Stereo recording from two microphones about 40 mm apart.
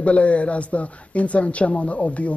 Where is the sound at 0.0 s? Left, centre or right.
Left.